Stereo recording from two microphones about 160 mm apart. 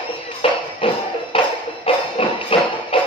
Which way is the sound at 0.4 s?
35° left (ahead or behind).